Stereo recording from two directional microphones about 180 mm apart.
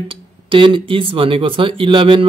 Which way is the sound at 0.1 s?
30° right (ahead or behind).